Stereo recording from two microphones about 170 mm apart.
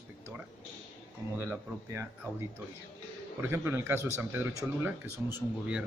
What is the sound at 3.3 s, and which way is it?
Speech, 10° right (ahead or behind).